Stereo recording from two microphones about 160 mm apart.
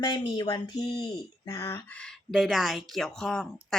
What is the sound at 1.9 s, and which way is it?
A woman's voice, centre (ahead or behind).